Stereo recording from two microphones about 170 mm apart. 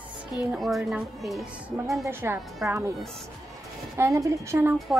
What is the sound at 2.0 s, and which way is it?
Speech, 15° right (ahead or behind).